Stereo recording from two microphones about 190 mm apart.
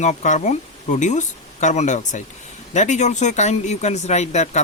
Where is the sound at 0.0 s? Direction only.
40° left (ahead or behind).